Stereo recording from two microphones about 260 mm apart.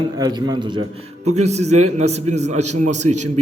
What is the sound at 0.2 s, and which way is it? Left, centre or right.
A man's voice, centre.